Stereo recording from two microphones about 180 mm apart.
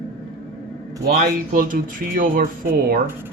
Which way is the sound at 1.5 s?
50° right (ahead or behind).